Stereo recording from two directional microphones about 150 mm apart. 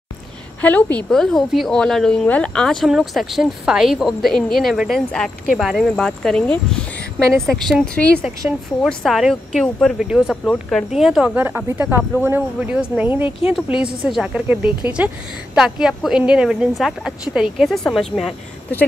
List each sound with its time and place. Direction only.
0.6 s speech: 10° left (ahead or behind); by 13.2 s 10° right (ahead or behind)
13.2 s speech: 40° left (ahead or behind)
14.0 s a woman's voice: 5° right (ahead or behind)